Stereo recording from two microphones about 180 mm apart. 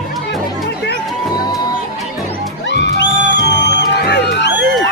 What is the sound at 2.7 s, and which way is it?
Music, 75° left (ahead or behind).